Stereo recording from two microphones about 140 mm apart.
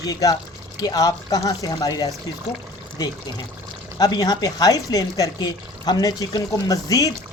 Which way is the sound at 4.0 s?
30° left (ahead or behind).